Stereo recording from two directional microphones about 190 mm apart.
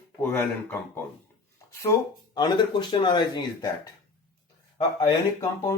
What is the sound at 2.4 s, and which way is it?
Speech, 25° left (ahead or behind).